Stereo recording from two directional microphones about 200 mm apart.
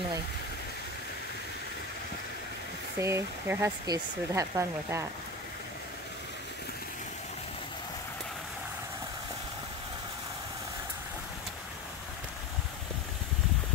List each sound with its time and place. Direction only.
3.0 s speech: 15° right (ahead or behind)